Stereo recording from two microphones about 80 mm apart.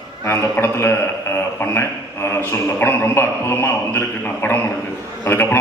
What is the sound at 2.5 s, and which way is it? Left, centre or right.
A man's voice, left.